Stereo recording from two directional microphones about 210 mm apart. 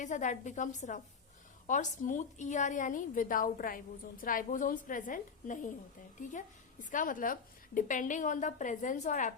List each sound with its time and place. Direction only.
0.0 s a woman's voice: 35° left (ahead or behind)
6.9 s a woman's voice: 40° left (ahead or behind)